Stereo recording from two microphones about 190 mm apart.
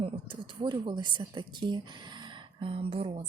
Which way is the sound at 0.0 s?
25° right (ahead or behind).